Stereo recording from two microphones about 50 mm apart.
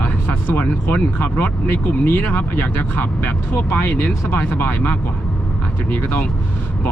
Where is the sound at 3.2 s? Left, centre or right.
Left.